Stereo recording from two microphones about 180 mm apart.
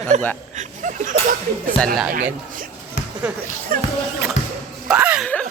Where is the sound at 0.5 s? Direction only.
45° right (ahead or behind).